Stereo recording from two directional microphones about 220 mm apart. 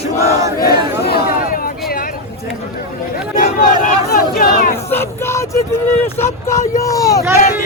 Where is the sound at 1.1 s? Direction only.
40° left (ahead or behind).